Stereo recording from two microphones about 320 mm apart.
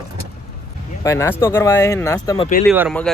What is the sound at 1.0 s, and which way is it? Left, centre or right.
Speech, centre.